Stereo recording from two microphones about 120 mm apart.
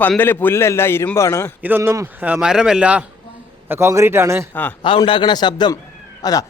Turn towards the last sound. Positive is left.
turn(degrees=30)  # may be behind; listen again after turning